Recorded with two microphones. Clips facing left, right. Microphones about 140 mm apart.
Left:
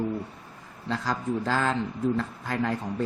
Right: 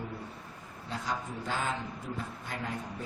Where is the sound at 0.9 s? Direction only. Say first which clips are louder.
Left 8 dB; 90° left.